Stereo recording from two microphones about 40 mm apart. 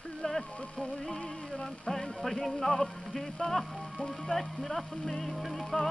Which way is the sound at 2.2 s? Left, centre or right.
Centre.